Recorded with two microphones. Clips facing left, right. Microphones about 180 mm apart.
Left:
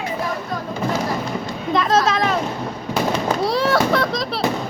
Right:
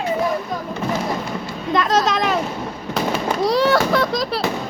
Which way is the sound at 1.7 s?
Centre (ahead or behind).